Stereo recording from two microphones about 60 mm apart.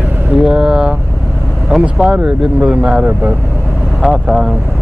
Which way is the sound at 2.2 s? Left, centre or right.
Centre.